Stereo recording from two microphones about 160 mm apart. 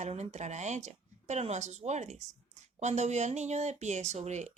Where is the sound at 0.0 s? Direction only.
45° right (ahead or behind).